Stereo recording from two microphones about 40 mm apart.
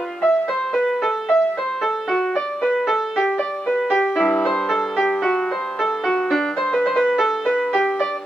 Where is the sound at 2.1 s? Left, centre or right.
Centre.